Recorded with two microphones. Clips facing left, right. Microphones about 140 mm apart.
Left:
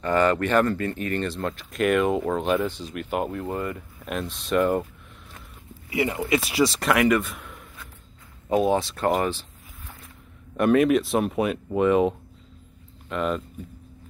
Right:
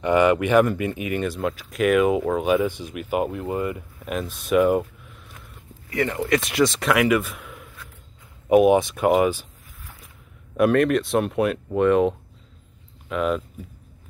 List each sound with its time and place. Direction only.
0.0 s speech: 15° right (ahead or behind)
5.9 s speech: 10° left (ahead or behind)
8.5 s speech: 15° right (ahead or behind)
10.5 s speech: centre (ahead or behind)